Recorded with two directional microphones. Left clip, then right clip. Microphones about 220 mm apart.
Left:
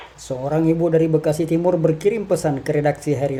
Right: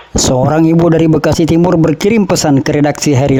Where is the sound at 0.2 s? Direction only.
45° right (ahead or behind).